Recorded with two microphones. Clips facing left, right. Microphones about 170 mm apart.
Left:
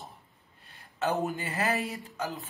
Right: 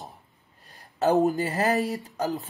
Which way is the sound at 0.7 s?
40° right (ahead or behind).